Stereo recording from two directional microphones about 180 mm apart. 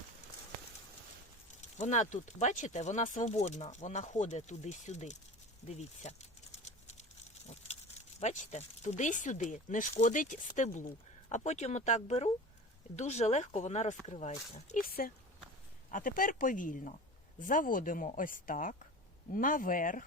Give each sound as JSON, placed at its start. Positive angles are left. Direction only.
{"t": 1.6, "sound": "speech", "side_deg": 40}
{"t": 8.2, "sound": "speech", "side_deg": 40}